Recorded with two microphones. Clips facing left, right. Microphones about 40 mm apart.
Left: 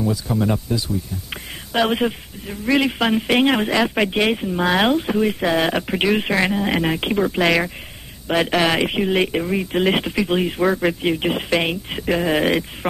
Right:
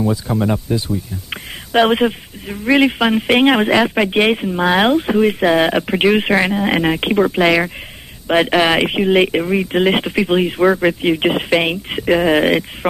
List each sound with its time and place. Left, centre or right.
0.0 s speech: right
3.0 s speech: centre
3.8 s speech: centre
4.1 s speech: right
8.3 s speech: right
12.3 s speech: centre